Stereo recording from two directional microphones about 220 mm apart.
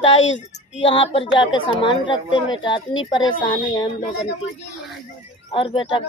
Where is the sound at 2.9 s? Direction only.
65° left (ahead or behind).